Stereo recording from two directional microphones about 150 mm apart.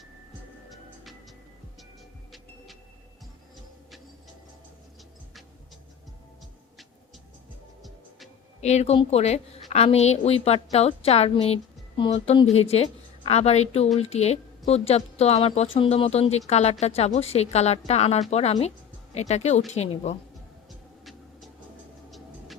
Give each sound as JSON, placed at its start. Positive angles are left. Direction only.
{"t": 7.8, "sound": "music", "side_deg": 0}
{"t": 8.6, "sound": "a woman's voice", "side_deg": 45}
{"t": 21.0, "sound": "a sound", "side_deg": 0}